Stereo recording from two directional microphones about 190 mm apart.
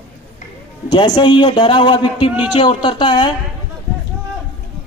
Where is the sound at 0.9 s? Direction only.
25° left (ahead or behind).